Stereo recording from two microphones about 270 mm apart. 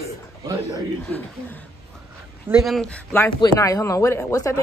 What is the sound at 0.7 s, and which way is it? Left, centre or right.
Speech, centre.